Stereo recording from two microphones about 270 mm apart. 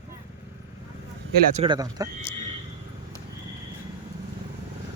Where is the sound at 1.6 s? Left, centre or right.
Centre.